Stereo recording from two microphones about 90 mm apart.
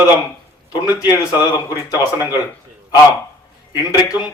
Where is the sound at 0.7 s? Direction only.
45° left (ahead or behind).